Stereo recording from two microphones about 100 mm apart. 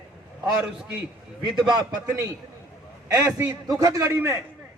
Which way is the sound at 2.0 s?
35° right (ahead or behind).